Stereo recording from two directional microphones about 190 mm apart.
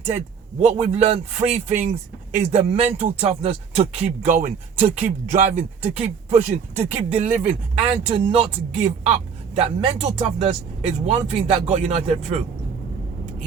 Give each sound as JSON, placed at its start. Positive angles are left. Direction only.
{"t": 0.6, "sound": "speech", "side_deg": -35}